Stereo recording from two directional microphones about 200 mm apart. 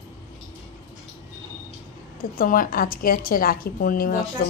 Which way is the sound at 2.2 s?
45° left (ahead or behind).